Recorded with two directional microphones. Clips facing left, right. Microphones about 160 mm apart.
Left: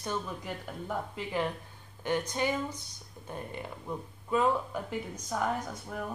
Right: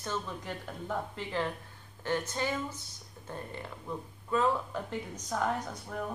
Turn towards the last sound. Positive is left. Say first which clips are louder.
# even
turn(degrees=5)  # may be behind; listen again after turning